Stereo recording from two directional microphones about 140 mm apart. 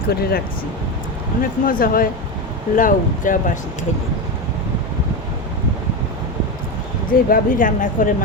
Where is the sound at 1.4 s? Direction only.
90° left.